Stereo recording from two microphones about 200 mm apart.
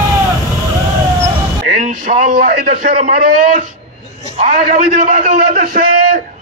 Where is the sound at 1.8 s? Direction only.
35° right (ahead or behind).